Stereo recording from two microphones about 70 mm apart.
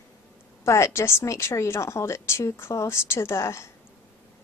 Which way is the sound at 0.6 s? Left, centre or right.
Left.